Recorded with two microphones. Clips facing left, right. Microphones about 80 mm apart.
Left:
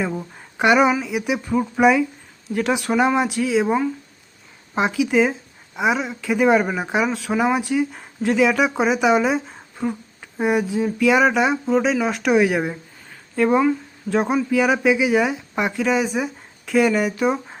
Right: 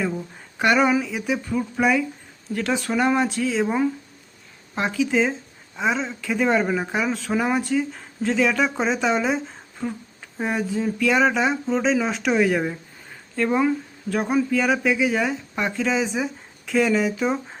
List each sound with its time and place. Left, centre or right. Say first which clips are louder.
0.0 s speech: left 1 dB; centre
7.1 s speech: left 2 dB; centre